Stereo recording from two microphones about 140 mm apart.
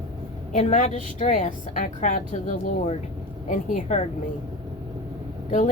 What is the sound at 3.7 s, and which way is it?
Speech, 55° left (ahead or behind).